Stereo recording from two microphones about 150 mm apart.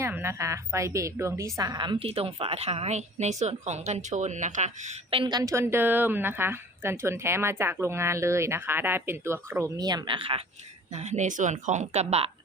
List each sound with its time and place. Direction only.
0.0 s a woman's voice: 15° right (ahead or behind); by 4.9 s 50° right (ahead or behind)
5.1 s a woman's voice: 35° right (ahead or behind)
5.4 s speech: 20° right (ahead or behind); by 10.4 s 35° right (ahead or behind)
10.9 s a woman's voice: 50° right (ahead or behind)